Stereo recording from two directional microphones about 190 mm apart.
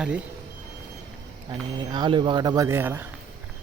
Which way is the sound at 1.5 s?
25° right (ahead or behind).